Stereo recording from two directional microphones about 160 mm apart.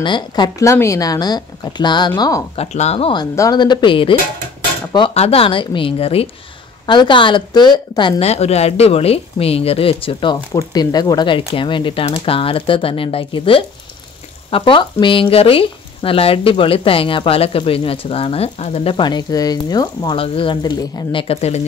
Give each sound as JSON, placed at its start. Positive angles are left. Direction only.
{"t": 0.0, "sound": "speech", "side_deg": 30}
{"t": 2.5, "sound": "speech", "side_deg": 40}
{"t": 8.2, "sound": "speech", "side_deg": 40}